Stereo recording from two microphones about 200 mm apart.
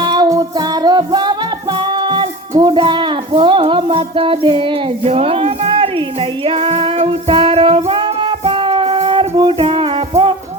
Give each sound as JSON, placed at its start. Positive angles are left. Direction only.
{"t": 0.0, "sound": "music", "side_deg": -20}
{"t": 1.9, "sound": "a sound", "side_deg": -20}
{"t": 6.4, "sound": "music", "side_deg": -25}